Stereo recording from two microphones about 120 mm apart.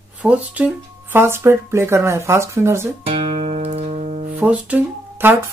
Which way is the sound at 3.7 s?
75° right (ahead or behind).